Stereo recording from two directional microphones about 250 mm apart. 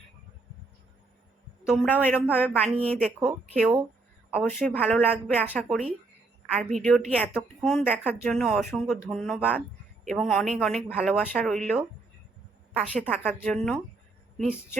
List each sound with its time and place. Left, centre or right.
1.6 s a man's voice: centre
6.8 s speech: centre
12.9 s speech: centre